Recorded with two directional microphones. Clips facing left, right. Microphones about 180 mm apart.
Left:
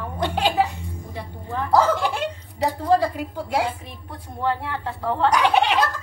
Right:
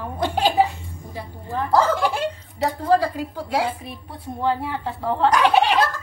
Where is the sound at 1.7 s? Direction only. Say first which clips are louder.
Even; 10° left (ahead or behind).